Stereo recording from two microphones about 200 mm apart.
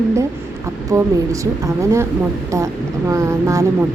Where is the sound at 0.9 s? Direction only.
15° right (ahead or behind).